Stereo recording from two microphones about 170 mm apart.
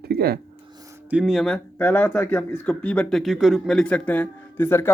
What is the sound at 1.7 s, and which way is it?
Speech, 15° left (ahead or behind).